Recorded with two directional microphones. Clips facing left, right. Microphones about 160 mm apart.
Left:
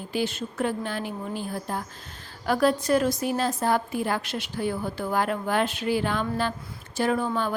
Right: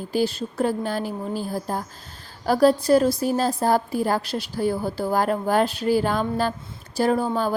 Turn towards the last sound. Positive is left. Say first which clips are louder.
# right 4 dB
turn(degrees=-35)  # may be behind; listen again after turning